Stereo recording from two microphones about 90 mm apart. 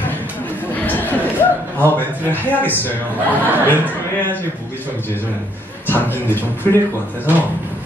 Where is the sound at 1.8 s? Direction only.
20° left (ahead or behind).